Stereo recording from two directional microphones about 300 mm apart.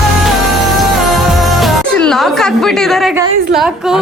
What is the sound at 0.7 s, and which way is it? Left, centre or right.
Music, centre.